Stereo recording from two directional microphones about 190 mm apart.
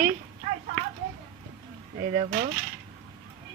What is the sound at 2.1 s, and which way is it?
Speech, 30° right (ahead or behind).